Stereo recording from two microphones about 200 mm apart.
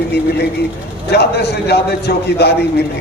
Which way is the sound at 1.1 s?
55° left (ahead or behind).